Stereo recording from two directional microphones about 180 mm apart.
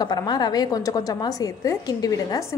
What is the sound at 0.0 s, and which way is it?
A woman's voice, 25° left (ahead or behind).